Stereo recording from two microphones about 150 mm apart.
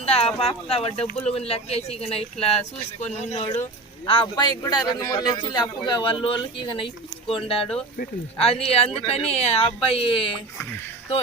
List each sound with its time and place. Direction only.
0.0 s speech: 40° left (ahead or behind)
4.6 s a man's voice: 25° left (ahead or behind)